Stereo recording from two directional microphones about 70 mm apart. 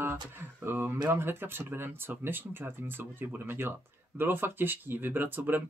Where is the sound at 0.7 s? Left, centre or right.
Right.